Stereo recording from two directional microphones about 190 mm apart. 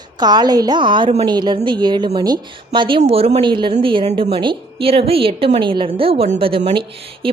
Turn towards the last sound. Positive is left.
turn(degrees=-25)  # may be behind; listen again after turning